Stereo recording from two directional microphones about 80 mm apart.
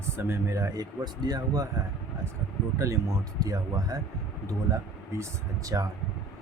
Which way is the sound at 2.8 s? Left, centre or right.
Right.